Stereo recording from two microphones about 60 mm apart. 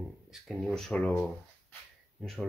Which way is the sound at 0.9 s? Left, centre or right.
Left.